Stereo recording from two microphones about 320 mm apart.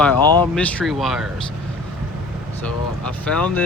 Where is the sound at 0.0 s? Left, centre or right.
Centre.